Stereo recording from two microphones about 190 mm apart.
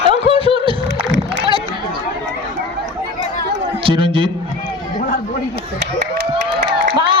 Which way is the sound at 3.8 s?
25° right (ahead or behind).